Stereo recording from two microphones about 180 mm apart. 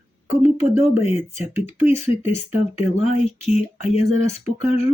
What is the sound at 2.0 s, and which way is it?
Speech, 35° left (ahead or behind).